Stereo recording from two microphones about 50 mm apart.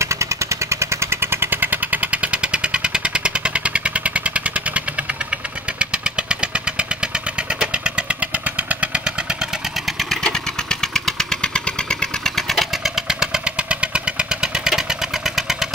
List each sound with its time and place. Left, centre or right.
0.0 s vehicle: right
7.6 s motorcycle: right
10.2 s engine: centre
11.4 s engine: centre
12.4 s vehicle: centre
12.8 s motorcycle: centre